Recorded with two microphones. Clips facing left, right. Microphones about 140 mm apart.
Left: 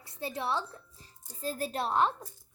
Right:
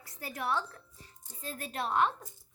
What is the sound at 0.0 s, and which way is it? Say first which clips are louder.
A child's voice: left 2 dB; 25° left (ahead or behind).